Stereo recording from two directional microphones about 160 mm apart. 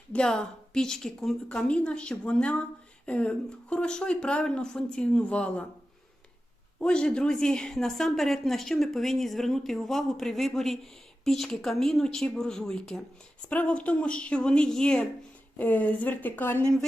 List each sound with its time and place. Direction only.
0.1 s a woman's voice: 5° left (ahead or behind)
6.7 s a woman's voice: 5° left (ahead or behind)